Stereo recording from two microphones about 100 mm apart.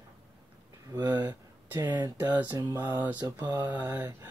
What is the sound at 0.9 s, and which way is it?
Speech, 45° right (ahead or behind).